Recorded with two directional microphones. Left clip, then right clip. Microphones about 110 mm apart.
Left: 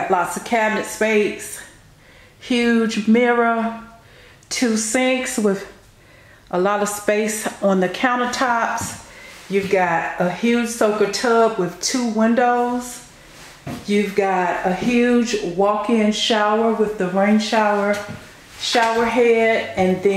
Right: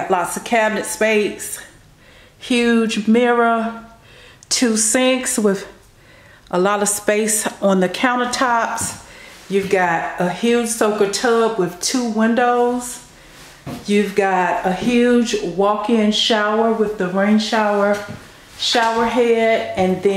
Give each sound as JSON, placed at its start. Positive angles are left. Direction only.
{"t": 0.1, "sound": "speech", "side_deg": -10}
{"t": 2.4, "sound": "speech", "side_deg": -10}
{"t": 13.8, "sound": "a woman's voice", "side_deg": -10}